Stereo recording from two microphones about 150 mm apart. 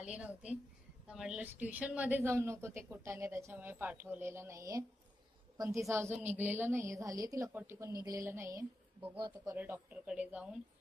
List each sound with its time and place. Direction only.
0.0 s a woman's voice: 5° right (ahead or behind)
9.1 s a woman's voice: 25° right (ahead or behind)
9.6 s a woman's voice: 15° right (ahead or behind)